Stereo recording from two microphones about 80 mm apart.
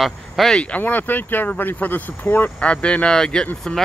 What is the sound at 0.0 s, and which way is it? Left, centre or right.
Speech, centre.